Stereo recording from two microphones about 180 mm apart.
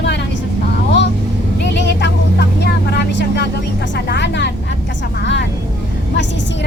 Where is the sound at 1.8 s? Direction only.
70° left (ahead or behind).